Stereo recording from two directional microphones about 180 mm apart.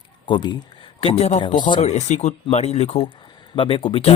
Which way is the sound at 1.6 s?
25° left (ahead or behind).